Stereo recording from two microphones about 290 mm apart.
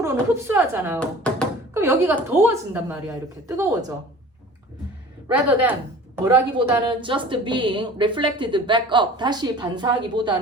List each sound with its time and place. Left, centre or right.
0.0 s a woman's voice: centre
0.9 s speech: centre
1.7 s a woman's voice: centre
5.3 s a woman's voice: centre